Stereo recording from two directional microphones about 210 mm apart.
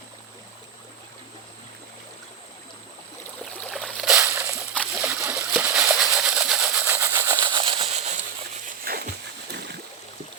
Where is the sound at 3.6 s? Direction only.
Centre (ahead or behind).